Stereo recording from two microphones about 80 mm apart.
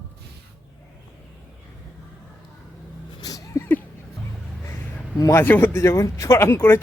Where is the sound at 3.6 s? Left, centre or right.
Left.